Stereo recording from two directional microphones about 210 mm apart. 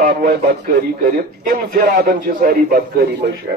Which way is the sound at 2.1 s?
45° right (ahead or behind).